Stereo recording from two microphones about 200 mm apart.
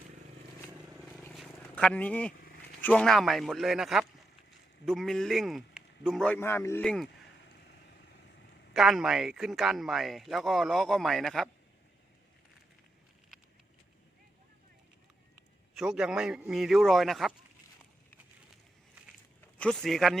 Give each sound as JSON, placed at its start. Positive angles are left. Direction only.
{"t": 1.2, "sound": "vehicle", "side_deg": 5}
{"t": 2.3, "sound": "vehicle", "side_deg": 50}
{"t": 2.8, "sound": "a man's voice", "side_deg": 5}
{"t": 7.6, "sound": "vehicle", "side_deg": 55}
{"t": 8.7, "sound": "a man's voice", "side_deg": 0}
{"t": 15.7, "sound": "a man's voice", "side_deg": 0}
{"t": 19.5, "sound": "speech", "side_deg": 5}